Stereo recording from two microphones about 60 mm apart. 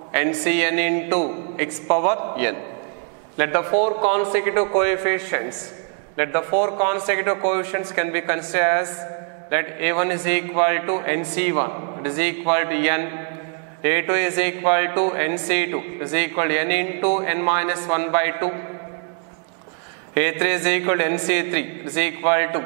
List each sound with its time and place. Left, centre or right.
0.1 s a man's voice: centre
20.2 s a man's voice: centre